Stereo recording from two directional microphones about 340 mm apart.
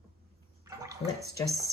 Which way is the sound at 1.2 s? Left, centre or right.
Right.